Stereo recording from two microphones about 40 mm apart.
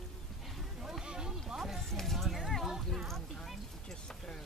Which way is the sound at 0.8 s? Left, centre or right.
Centre.